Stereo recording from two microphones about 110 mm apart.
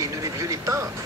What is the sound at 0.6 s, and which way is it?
Speech, 30° right (ahead or behind).